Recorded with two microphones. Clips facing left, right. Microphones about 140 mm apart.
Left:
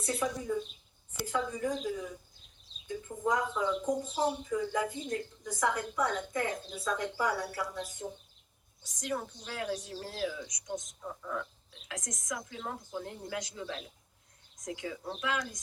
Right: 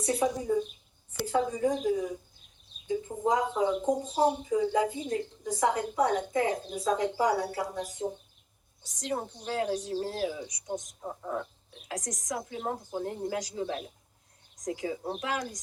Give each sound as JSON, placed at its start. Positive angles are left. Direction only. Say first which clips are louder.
{"t": 0.1, "sound": "speech", "louder": "right 5 dB", "side_deg": -30}
{"t": 3.2, "sound": "speech", "louder": "right 3 dB", "side_deg": -30}
{"t": 3.5, "sound": "speech", "louder": "right 4 dB", "side_deg": -45}
{"t": 3.8, "sound": "speech", "louder": "right 5 dB", "side_deg": -30}
{"t": 6.6, "sound": "a woman's voice", "louder": "right 6 dB", "side_deg": -45}